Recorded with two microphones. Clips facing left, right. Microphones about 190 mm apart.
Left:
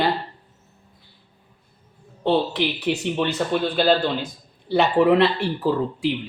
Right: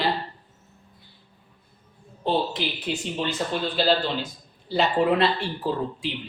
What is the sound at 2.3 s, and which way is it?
Speech, 65° left (ahead or behind).